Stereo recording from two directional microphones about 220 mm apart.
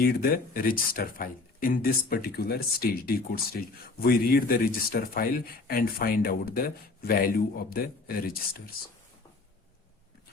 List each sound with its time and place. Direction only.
0.0 s speech: 40° left (ahead or behind)